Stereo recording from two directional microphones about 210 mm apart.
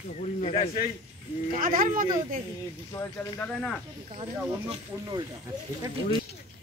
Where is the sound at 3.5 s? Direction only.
5° left (ahead or behind).